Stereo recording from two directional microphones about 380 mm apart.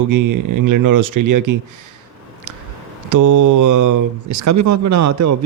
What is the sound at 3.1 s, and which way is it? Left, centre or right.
Speech, right.